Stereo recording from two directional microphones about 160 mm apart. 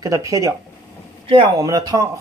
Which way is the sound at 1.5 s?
20° right (ahead or behind).